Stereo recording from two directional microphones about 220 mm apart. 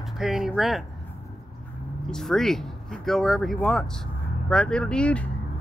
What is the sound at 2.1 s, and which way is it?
Speech, centre (ahead or behind).